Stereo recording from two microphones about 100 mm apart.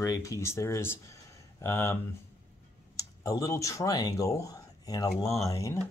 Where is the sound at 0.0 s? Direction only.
35° left (ahead or behind).